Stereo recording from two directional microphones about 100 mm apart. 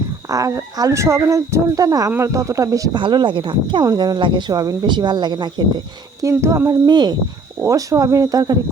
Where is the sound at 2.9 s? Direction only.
50° right (ahead or behind).